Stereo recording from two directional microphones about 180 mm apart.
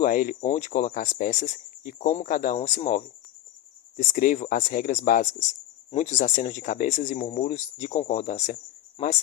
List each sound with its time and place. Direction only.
0.0 s speech: 50° left (ahead or behind)
9.0 s speech: 30° left (ahead or behind)